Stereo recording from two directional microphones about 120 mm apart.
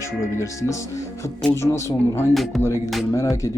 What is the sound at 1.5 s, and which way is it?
Music, 20° left (ahead or behind).